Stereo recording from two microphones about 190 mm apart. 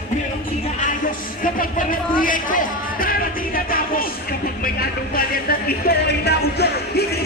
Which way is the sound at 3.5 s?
50° left (ahead or behind).